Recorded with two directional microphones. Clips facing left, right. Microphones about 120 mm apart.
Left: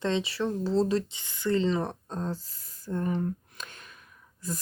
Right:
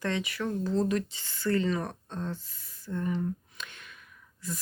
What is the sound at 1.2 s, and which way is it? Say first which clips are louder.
Speech: left 2 dB; 15° left (ahead or behind).